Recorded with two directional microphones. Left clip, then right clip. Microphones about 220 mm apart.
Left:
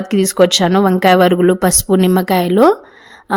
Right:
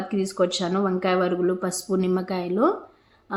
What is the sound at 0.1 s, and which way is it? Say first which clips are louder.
Speech: left 13 dB; 45° left (ahead or behind).